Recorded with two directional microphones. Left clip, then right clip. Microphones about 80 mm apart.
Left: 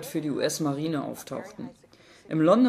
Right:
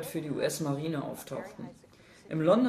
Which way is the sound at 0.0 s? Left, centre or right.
Left.